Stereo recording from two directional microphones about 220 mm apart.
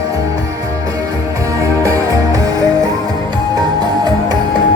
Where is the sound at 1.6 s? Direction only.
15° right (ahead or behind).